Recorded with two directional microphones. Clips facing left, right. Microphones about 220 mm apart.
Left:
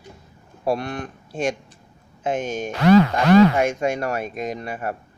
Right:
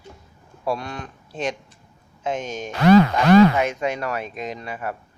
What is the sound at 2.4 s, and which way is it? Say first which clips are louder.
Speech: left 4 dB; 10° left (ahead or behind).